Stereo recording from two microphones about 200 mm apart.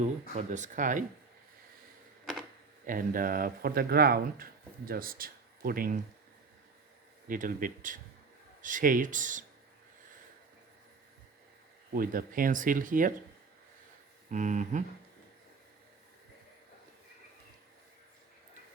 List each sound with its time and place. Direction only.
0.0 s speech: 35° right (ahead or behind)
2.8 s speech: 45° right (ahead or behind)
7.3 s speech: 40° right (ahead or behind)
11.9 s speech: 45° right (ahead or behind)
14.3 s speech: 40° right (ahead or behind)